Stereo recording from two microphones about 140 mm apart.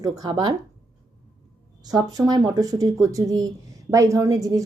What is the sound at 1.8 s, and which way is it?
A woman's voice, 30° right (ahead or behind).